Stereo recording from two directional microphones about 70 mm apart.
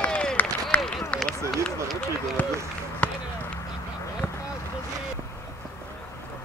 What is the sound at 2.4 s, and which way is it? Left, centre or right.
Run, left.